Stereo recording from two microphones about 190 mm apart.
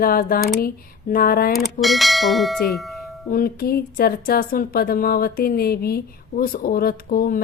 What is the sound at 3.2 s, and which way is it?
Speech, 50° left (ahead or behind).